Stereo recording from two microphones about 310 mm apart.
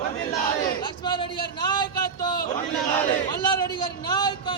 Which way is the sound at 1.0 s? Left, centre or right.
Centre.